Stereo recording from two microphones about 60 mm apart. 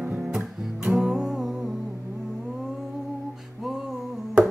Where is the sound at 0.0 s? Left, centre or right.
Centre.